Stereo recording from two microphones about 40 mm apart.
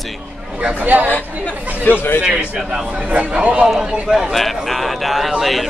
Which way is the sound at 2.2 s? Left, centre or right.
Centre.